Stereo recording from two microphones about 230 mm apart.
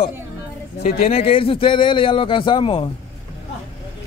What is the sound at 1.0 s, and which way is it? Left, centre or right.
Speech, left.